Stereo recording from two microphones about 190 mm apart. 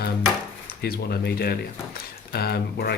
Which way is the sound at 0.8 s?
55° left (ahead or behind).